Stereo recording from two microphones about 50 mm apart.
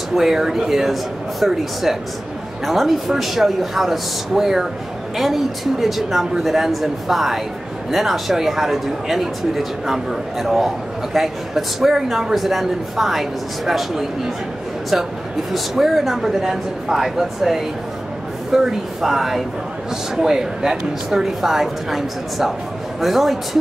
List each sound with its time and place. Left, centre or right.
0.1 s a man's voice: centre
15.5 s a man's voice: centre